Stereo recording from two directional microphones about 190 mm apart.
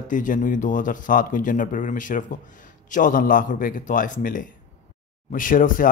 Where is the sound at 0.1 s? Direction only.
45° left (ahead or behind).